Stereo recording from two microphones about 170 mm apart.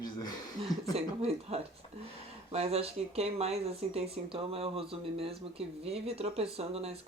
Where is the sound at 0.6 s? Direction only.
35° right (ahead or behind).